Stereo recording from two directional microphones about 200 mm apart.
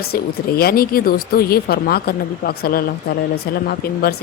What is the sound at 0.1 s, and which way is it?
A woman's voice, 50° left (ahead or behind).